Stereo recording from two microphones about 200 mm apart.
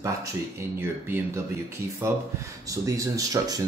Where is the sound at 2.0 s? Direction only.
15° right (ahead or behind).